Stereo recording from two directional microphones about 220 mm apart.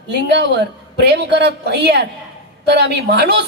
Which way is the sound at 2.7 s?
45° right (ahead or behind).